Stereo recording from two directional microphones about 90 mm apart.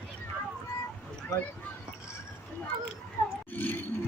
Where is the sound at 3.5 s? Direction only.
20° left (ahead or behind).